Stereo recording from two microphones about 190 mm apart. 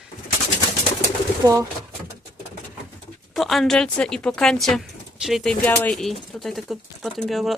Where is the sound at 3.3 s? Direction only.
Centre (ahead or behind).